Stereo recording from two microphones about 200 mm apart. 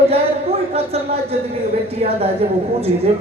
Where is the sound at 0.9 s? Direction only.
30° right (ahead or behind).